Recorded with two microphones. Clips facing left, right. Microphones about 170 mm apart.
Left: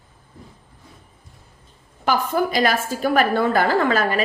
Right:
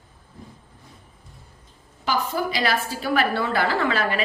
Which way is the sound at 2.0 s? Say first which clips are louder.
Left 4 dB; 50° left (ahead or behind).